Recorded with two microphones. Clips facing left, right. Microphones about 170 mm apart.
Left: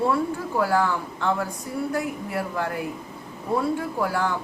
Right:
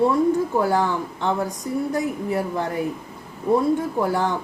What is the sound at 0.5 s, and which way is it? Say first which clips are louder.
A woman's voice: right 2 dB; 20° right (ahead or behind).